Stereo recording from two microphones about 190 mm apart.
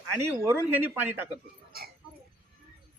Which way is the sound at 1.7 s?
55° right (ahead or behind).